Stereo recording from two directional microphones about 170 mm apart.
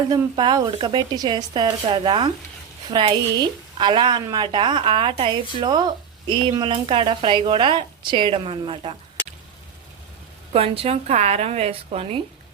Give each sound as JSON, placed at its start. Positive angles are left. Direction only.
{"t": 0.1, "sound": "a woman's voice", "side_deg": -25}
{"t": 10.5, "sound": "a woman's voice", "side_deg": -35}